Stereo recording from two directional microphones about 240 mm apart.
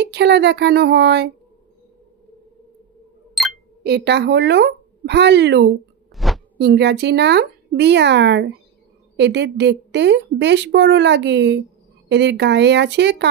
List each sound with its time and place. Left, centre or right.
0.0 s a woman's voice: right
3.4 s chink: centre
3.8 s a woman's voice: right
6.1 s a sound: centre
6.6 s a woman's voice: right